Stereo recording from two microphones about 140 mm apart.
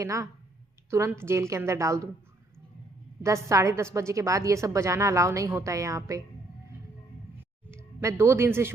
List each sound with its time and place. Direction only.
0.0 s a woman's voice: 20° right (ahead or behind)
3.2 s a woman's voice: 20° right (ahead or behind)
7.7 s speech: 20° right (ahead or behind)